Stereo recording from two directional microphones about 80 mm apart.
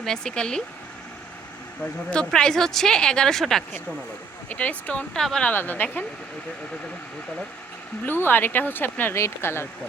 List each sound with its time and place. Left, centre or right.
0.0 s speech: centre
1.8 s speech: centre
4.4 s speech: centre
5.1 s speech: centre
5.5 s speech: left
8.0 s speech: left